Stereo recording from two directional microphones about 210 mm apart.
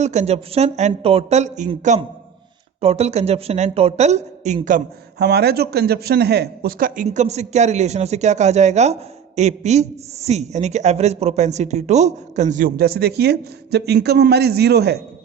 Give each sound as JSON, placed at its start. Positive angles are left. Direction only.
{"t": 0.0, "sound": "speech", "side_deg": -35}
{"t": 5.2, "sound": "speech", "side_deg": -50}